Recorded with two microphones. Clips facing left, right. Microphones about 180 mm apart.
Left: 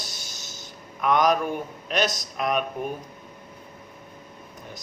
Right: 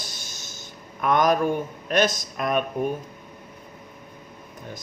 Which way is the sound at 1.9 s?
50° right (ahead or behind).